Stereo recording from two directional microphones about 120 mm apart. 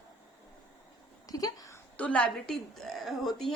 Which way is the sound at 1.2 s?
30° left (ahead or behind).